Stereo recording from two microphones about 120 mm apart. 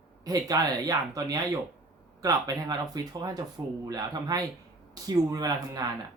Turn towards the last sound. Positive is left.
turn(degrees=-35)  # may be behind; listen again after turning